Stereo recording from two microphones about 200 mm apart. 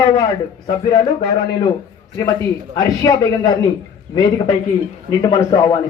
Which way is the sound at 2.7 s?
20° left (ahead or behind).